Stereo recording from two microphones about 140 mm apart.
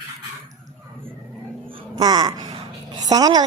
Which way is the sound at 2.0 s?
30° right (ahead or behind).